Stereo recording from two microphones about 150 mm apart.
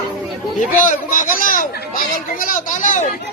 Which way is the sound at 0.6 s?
60° left (ahead or behind).